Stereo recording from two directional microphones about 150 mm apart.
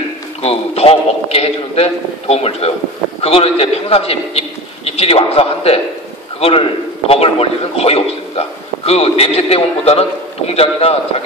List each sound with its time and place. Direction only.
0.4 s a man's voice: 40° left (ahead or behind)
7.1 s a man's voice: 40° left (ahead or behind)